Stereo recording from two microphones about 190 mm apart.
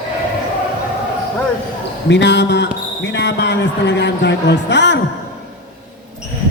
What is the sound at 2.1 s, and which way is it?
A man's voice, 65° left (ahead or behind).